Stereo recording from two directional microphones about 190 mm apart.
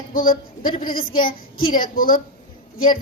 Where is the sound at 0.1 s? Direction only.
50° left (ahead or behind).